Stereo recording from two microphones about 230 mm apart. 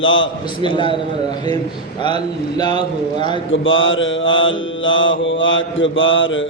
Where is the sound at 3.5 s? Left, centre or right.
Left.